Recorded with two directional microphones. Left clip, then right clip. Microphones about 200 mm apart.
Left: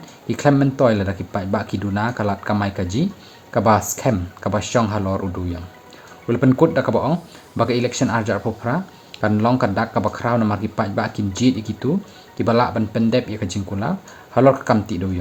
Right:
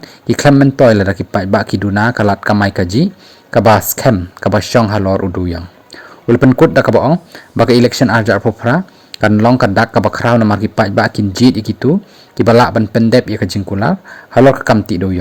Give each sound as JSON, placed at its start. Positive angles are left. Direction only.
{"t": 0.3, "sound": "speech", "side_deg": -45}